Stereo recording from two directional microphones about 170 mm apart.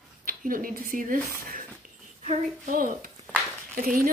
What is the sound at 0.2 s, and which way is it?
A woman's voice, 55° right (ahead or behind).